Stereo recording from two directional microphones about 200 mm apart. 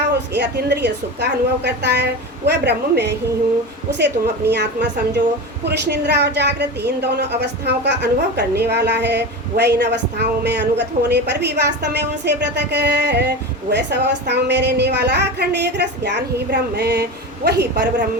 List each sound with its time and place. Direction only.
0.3 s speech: 55° right (ahead or behind)